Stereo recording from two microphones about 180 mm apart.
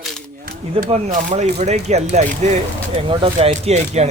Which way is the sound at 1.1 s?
40° right (ahead or behind).